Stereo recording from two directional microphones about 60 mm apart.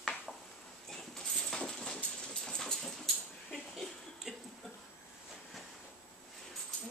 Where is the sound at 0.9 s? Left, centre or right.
Centre.